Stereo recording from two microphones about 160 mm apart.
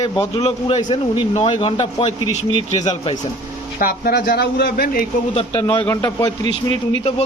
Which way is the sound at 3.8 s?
65° left (ahead or behind).